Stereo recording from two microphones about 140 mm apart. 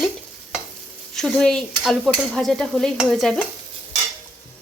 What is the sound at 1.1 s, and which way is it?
Stir, 5° left (ahead or behind).